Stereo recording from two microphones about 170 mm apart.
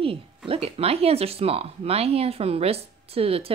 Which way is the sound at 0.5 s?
35° right (ahead or behind).